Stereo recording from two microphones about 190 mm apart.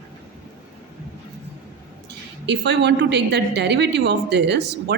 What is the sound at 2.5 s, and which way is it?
A woman's voice, 65° right (ahead or behind).